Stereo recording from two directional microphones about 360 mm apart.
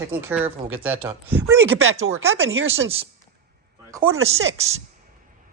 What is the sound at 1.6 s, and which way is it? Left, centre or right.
Speech, right.